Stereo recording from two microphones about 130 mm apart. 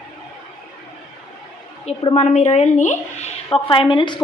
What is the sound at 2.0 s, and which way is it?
Speech, 45° left (ahead or behind).